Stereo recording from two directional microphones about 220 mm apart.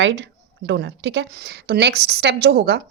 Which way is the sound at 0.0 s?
55° right (ahead or behind).